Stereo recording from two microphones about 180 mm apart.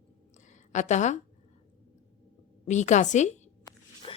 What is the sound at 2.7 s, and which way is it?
Speech, 40° left (ahead or behind).